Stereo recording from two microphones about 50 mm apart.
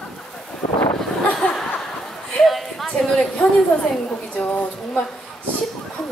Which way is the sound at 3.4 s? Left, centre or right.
Centre.